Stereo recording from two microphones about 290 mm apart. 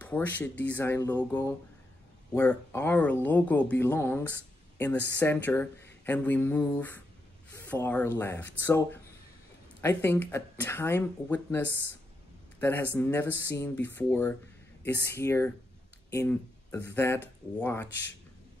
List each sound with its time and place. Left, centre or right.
0.0 s speech: centre